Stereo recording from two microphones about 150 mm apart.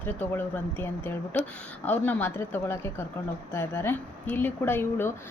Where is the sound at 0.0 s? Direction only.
10° left (ahead or behind).